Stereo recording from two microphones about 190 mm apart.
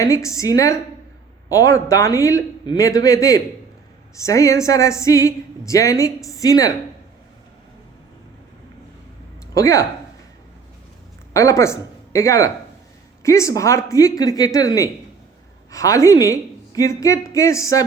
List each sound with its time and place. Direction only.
0.0 s a woman's voice: 15° left (ahead or behind)
9.6 s a woman's voice: 15° left (ahead or behind)
11.3 s a woman's voice: 15° left (ahead or behind)